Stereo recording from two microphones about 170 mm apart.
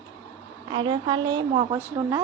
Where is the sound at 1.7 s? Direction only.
15° right (ahead or behind).